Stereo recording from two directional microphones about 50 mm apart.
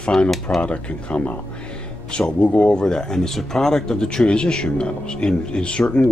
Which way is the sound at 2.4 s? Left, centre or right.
Left.